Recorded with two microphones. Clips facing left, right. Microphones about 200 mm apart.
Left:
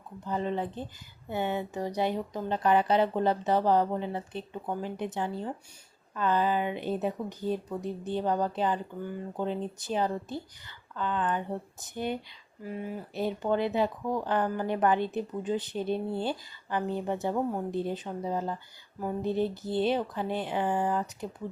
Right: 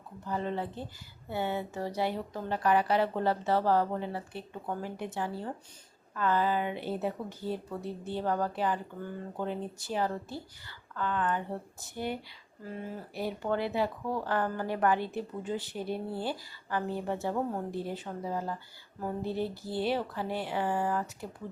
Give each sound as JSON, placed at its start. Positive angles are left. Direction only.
{"t": 0.3, "sound": "speech", "side_deg": 20}